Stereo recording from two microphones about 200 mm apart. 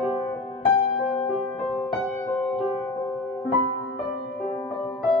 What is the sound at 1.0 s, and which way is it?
Music, 5° left (ahead or behind).